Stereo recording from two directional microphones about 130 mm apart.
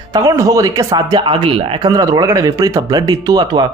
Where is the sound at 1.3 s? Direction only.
40° right (ahead or behind).